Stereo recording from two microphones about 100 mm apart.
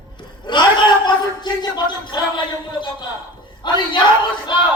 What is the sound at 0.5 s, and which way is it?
A man's voice, 45° left (ahead or behind).